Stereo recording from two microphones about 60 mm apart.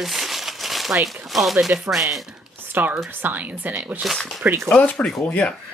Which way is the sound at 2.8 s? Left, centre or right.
Right.